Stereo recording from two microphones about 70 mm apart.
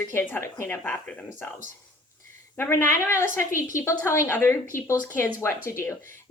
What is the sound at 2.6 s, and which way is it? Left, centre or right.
A woman's voice, left.